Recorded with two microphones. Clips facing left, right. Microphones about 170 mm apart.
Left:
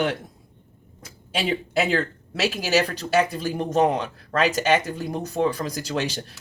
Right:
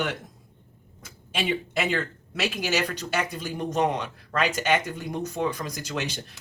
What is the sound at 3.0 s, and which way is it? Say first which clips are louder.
Speech: left 7 dB; 35° left (ahead or behind).